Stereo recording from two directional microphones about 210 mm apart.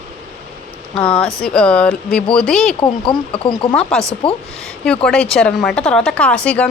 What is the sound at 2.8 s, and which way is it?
Speech, 25° left (ahead or behind).